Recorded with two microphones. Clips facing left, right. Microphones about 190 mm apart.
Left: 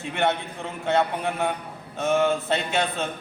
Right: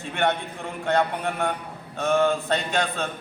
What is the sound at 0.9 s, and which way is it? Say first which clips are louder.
A man's voice: even; 5° left (ahead or behind).